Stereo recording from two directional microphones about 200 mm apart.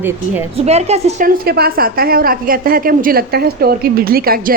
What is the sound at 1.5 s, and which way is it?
A woman's voice, 50° right (ahead or behind).